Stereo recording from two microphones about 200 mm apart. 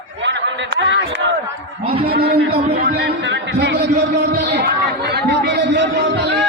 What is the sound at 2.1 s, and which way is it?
A man's voice, 50° right (ahead or behind).